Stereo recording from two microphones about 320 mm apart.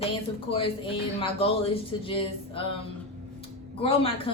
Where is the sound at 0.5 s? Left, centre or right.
Centre.